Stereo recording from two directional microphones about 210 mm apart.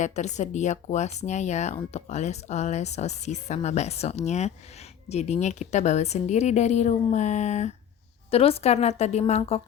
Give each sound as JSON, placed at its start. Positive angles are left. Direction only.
{"t": 0.0, "sound": "speech", "side_deg": 35}